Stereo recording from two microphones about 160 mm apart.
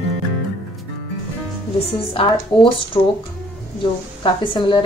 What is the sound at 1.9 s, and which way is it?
A woman's voice, 35° left (ahead or behind).